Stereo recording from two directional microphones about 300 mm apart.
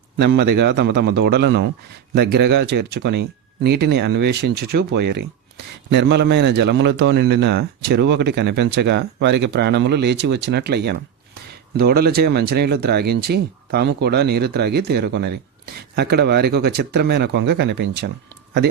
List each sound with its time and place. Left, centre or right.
0.2 s speech: right